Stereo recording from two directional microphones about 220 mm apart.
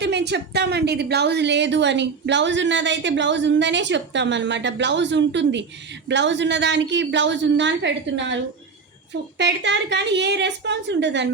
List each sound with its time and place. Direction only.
0.0 s a woman's voice: 50° right (ahead or behind)
9.4 s a woman's voice: 50° right (ahead or behind)